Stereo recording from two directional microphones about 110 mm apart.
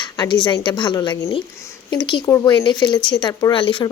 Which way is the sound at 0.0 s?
45° left (ahead or behind).